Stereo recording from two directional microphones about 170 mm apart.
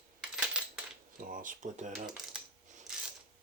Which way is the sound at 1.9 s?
5° right (ahead or behind).